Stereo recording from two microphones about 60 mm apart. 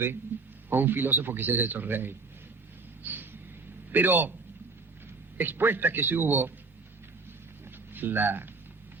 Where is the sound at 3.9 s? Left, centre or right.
Right.